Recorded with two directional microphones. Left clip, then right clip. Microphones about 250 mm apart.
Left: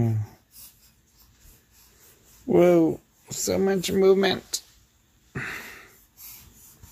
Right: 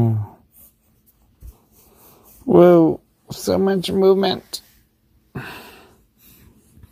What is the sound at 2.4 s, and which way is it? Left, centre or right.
Speech, right.